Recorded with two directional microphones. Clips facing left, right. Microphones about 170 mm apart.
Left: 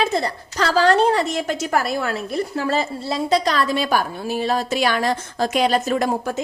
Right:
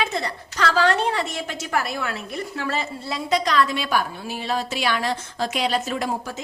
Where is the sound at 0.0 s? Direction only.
35° left (ahead or behind).